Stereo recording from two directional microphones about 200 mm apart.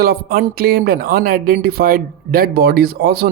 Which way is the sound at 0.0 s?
45° right (ahead or behind).